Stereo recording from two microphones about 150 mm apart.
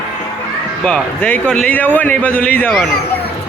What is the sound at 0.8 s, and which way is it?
A man's voice, 5° left (ahead or behind).